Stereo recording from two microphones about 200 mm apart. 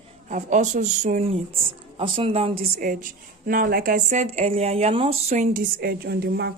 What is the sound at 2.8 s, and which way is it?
A woman's voice, 40° right (ahead or behind).